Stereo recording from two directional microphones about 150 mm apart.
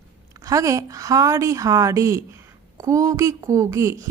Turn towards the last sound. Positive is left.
turn(degrees=-20)  # may be behind; listen again after turning